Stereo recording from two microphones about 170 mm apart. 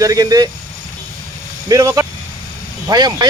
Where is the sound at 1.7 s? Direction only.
20° right (ahead or behind).